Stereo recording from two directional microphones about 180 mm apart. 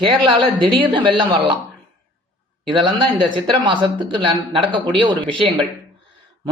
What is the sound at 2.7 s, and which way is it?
A woman's voice, 30° right (ahead or behind).